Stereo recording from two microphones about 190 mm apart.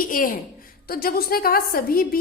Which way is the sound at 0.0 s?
45° left (ahead or behind).